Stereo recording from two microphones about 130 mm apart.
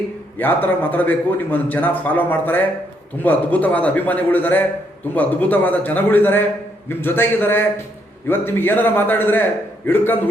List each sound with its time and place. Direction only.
0.3 s a man's voice: 15° left (ahead or behind)